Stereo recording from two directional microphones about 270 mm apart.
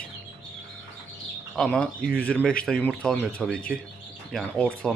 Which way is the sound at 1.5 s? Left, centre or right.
Centre.